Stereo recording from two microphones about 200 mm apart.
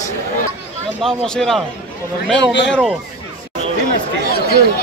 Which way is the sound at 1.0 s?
Centre (ahead or behind).